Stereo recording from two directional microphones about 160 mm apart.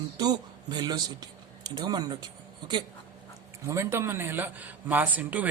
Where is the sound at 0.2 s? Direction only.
25° right (ahead or behind).